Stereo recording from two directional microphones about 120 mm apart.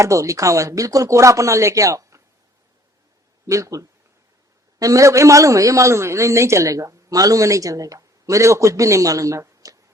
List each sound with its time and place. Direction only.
0.0 s a man's voice: 25° right (ahead or behind)
3.4 s a man's voice: 25° right (ahead or behind)